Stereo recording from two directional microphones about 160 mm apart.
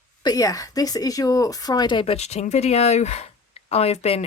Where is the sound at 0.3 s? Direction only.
20° left (ahead or behind).